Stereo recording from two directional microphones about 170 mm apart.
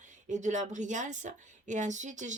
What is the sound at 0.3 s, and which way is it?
Speech, 45° right (ahead or behind).